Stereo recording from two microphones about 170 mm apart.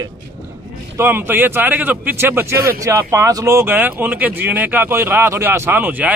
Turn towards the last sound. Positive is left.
turn(degrees=-10)  # may be behind; listen again after turning